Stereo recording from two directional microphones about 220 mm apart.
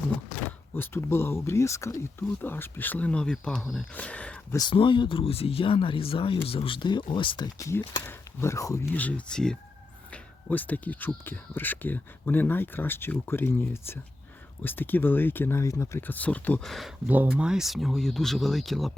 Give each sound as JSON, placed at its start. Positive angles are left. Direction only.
{"t": 0.7, "sound": "speech", "side_deg": 10}
{"t": 4.5, "sound": "speech", "side_deg": 20}